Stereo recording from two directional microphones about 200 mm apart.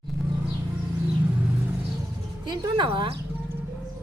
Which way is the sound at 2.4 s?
20° right (ahead or behind).